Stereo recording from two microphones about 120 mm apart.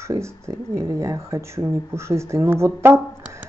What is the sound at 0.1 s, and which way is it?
Speech, 25° right (ahead or behind).